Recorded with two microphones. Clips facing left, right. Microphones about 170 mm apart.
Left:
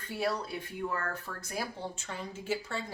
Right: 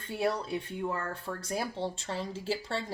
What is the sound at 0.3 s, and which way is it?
Speech, 25° right (ahead or behind).